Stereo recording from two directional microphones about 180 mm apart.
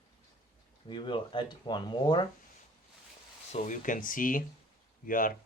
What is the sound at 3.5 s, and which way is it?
Speech, 40° left (ahead or behind).